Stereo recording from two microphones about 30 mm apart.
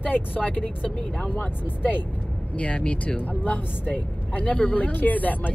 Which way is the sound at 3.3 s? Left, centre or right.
Left.